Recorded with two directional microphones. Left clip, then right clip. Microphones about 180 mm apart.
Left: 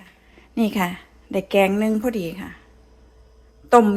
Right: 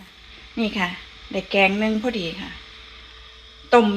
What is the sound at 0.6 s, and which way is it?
A woman's voice, 35° left (ahead or behind).